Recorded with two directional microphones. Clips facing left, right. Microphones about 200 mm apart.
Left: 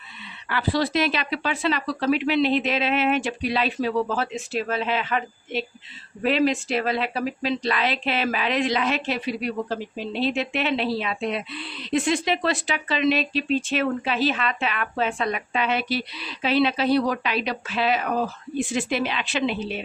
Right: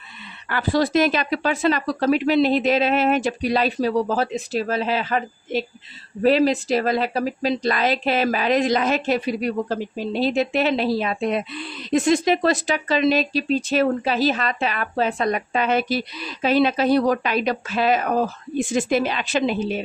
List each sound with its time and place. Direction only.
0.4 s speech: 45° right (ahead or behind)